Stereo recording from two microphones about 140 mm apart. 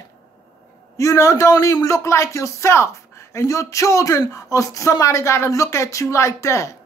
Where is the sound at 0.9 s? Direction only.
20° left (ahead or behind).